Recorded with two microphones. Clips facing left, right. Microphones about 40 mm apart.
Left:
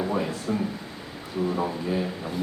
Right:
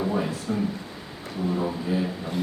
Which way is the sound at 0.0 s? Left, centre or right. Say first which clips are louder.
Right 1 dB; centre.